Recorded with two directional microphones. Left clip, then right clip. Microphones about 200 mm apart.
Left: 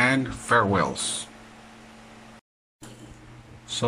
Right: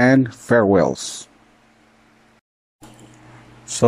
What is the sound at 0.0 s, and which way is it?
Speech, 35° right (ahead or behind).